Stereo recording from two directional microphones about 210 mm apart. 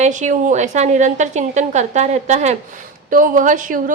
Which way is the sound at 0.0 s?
35° right (ahead or behind).